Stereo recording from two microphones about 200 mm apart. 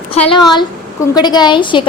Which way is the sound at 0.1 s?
25° left (ahead or behind).